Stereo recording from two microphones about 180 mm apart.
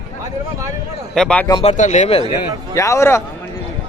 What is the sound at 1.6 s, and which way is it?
Speech, 40° left (ahead or behind).